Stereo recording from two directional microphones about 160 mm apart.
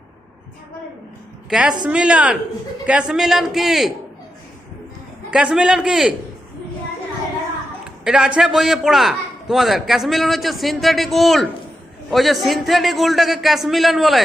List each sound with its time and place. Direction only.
1.5 s a man's voice: 5° right (ahead or behind)
5.3 s a man's voice: 5° right (ahead or behind)
8.0 s a man's voice: 5° right (ahead or behind)